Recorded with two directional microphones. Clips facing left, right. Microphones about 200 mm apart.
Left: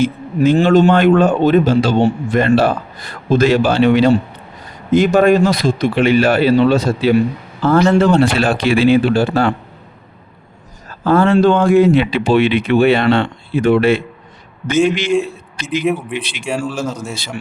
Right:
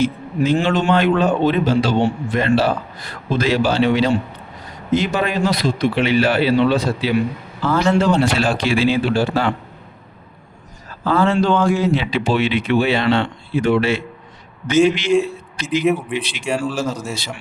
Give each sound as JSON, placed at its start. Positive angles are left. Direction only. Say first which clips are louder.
{"t": 0.6, "sound": "a man's voice", "louder": "left 6 dB", "side_deg": 40}
{"t": 11.0, "sound": "a man's voice", "louder": "left 5 dB", "side_deg": 50}
{"t": 15.8, "sound": "speech", "louder": "even", "side_deg": 0}